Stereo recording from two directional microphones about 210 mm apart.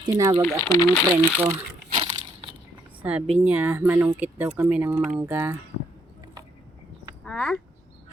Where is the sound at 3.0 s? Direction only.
5° right (ahead or behind).